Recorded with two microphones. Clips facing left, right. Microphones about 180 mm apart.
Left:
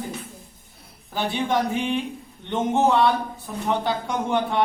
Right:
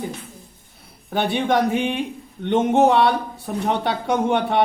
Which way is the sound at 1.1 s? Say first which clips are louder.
Right 4 dB; 65° right (ahead or behind).